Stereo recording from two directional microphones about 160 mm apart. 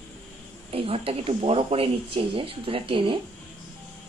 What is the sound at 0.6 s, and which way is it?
Speech, 35° right (ahead or behind).